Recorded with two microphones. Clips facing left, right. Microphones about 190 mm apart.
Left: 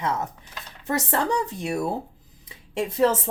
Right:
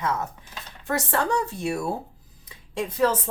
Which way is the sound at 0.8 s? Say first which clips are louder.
Left 1 dB; 20° left (ahead or behind).